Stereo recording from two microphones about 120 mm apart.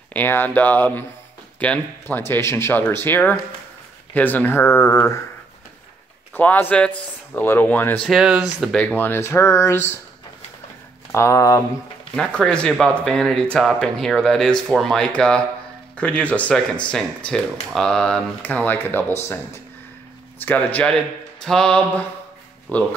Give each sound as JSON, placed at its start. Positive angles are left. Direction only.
{"t": 0.1, "sound": "speech", "side_deg": 15}
{"t": 4.6, "sound": "speech", "side_deg": 30}
{"t": 6.3, "sound": "speech", "side_deg": 15}
{"t": 8.0, "sound": "speech", "side_deg": -5}
{"t": 8.7, "sound": "speech", "side_deg": 15}
{"t": 11.1, "sound": "speech", "side_deg": 25}
{"t": 12.2, "sound": "speech", "side_deg": 5}